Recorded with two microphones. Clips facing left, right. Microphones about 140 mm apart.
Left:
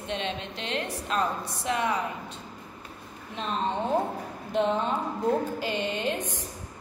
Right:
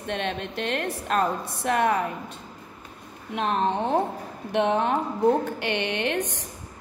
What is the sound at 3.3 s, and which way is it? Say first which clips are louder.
A woman's voice: right 5 dB; 65° right (ahead or behind).